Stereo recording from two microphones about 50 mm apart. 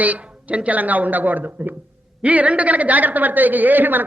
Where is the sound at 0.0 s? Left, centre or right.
Right.